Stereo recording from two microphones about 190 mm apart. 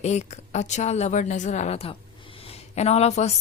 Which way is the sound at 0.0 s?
35° left (ahead or behind).